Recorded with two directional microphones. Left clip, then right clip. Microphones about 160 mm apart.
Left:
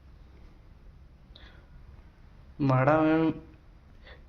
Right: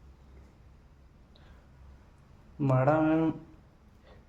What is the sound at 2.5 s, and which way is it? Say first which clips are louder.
Speech: left 2 dB; 5° right (ahead or behind).